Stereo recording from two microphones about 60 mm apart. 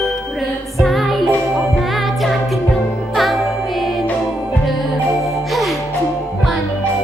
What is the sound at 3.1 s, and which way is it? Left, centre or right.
Music, centre.